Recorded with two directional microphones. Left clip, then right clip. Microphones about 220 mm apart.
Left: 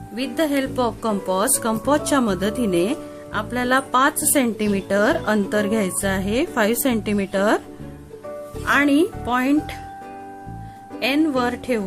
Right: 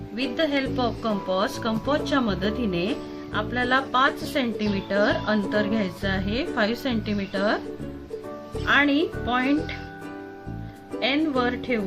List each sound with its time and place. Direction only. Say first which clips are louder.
0.2 s a woman's voice: left 3 dB; 50° left (ahead or behind)
8.6 s a woman's voice: left 3 dB; 50° left (ahead or behind)
11.0 s a woman's voice: left 3 dB; 45° left (ahead or behind)